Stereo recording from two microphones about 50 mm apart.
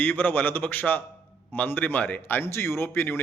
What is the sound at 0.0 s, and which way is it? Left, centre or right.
Speech, left.